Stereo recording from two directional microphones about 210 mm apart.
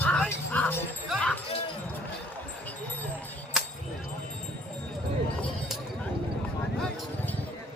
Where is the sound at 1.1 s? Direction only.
5° left (ahead or behind).